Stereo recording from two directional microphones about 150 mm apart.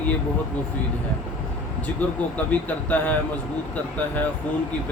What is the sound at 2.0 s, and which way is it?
Speech, 10° left (ahead or behind).